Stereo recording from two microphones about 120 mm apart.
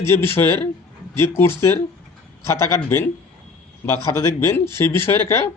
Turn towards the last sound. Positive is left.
turn(degrees=20)  # may be behind; listen again after turning